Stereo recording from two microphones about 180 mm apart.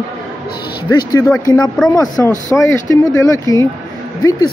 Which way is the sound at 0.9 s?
20° left (ahead or behind).